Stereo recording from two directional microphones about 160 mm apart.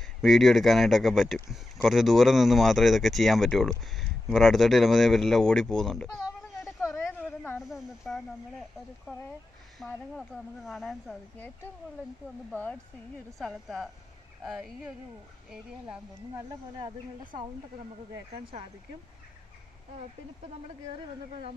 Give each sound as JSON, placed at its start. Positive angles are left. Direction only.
{"t": 0.0, "sound": "speech", "side_deg": 0}
{"t": 6.8, "sound": "a sound", "side_deg": 15}
{"t": 7.6, "sound": "speech", "side_deg": 0}
{"t": 13.4, "sound": "speech", "side_deg": 0}
{"t": 16.3, "sound": "speech", "side_deg": -20}
{"t": 18.3, "sound": "speech", "side_deg": -40}